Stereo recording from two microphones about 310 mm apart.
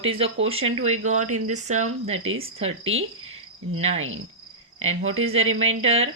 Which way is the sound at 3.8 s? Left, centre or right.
Right.